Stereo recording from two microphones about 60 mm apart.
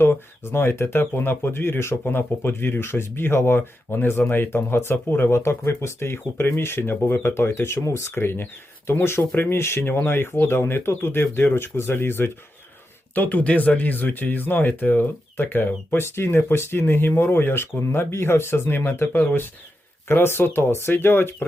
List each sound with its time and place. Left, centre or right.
0.0 s speech: left
5.3 s speech: left
8.1 s speech: left
13.1 s speech: left